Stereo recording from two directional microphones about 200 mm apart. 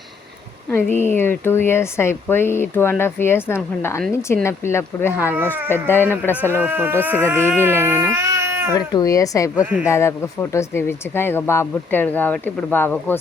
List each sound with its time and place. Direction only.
0.7 s speech: 10° left (ahead or behind)
6.5 s speech: 10° right (ahead or behind)
7.4 s speech: 10° left (ahead or behind)
7.8 s speech: 10° right (ahead or behind)
8.7 s speech: 20° left (ahead or behind)
9.6 s speech: 5° right (ahead or behind)
9.9 s speech: 15° left (ahead or behind)